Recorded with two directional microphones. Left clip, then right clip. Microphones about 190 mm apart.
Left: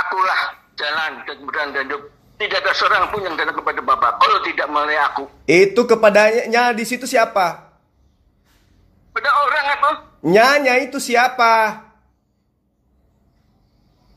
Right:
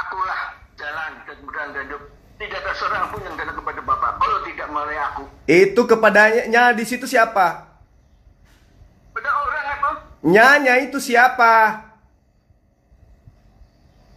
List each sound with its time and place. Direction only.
0.0 s speech: 50° left (ahead or behind)
5.4 s speech: 25° left (ahead or behind)
9.1 s a sound: 50° left (ahead or behind)
10.2 s speech: 25° left (ahead or behind)